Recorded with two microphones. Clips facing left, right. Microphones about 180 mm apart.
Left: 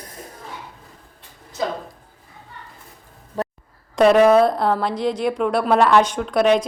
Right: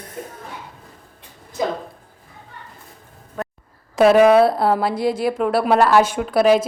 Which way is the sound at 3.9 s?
5° right (ahead or behind).